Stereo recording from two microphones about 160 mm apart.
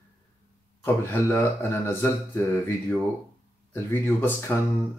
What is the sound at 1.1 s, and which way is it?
Speech, 15° left (ahead or behind).